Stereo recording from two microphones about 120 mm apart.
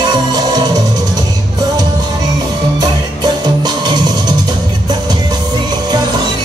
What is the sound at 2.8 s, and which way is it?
Music, 35° right (ahead or behind).